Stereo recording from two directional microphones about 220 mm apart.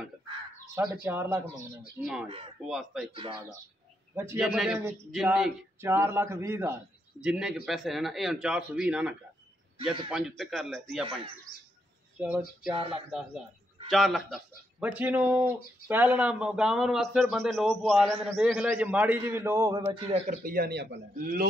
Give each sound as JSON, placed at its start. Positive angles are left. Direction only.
{"t": 1.0, "sound": "a man's voice", "side_deg": -10}
{"t": 2.2, "sound": "speech", "side_deg": -25}
{"t": 2.6, "sound": "a man's voice", "side_deg": 0}
{"t": 3.1, "sound": "speech", "side_deg": -25}
{"t": 4.1, "sound": "a man's voice", "side_deg": -10}
{"t": 12.2, "sound": "a man's voice", "side_deg": -5}
{"t": 12.7, "sound": "speech", "side_deg": -25}
{"t": 13.8, "sound": "a man's voice", "side_deg": 0}